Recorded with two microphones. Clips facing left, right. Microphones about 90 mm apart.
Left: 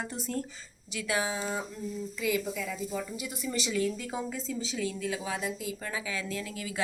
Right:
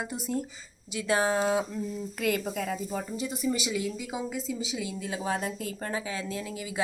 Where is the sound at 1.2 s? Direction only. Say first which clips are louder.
Right 7 dB; 50° right (ahead or behind).